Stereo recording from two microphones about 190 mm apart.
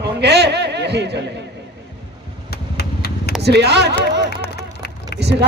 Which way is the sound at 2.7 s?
55° left (ahead or behind).